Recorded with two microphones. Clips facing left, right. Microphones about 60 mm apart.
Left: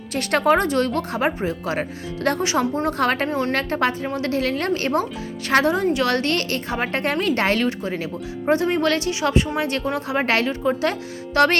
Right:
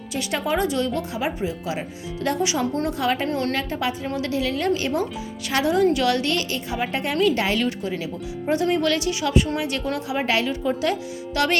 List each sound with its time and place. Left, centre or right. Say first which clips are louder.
0.1 s speech: left 6 dB; left
3.2 s a woman's voice: left 1 dB; left
3.5 s speech: left 4 dB; left
4.0 s a woman's voice: left 2 dB; left
4.3 s speech: left 1 dB; left
5.8 s speech: right 1 dB; left
6.1 s speech: left 2 dB; left
7.7 s speech: left 2 dB; left